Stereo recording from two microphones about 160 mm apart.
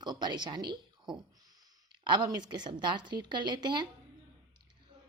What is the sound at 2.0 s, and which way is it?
A woman's voice, 30° right (ahead or behind).